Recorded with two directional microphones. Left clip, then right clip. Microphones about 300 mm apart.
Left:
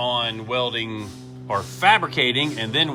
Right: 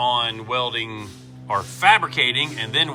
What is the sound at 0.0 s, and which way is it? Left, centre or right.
A man's voice, centre.